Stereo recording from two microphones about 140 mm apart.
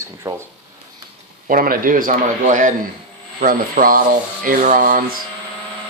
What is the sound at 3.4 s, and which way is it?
Speech, 80° right.